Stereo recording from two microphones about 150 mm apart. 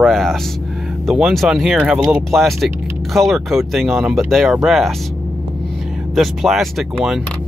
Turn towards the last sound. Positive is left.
turn(degrees=0)  # may be behind; listen again after turning